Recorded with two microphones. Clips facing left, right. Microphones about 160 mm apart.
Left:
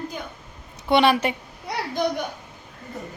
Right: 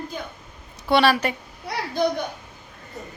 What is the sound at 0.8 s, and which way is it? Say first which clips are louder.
Speech: left 1 dB; 20° left (ahead or behind).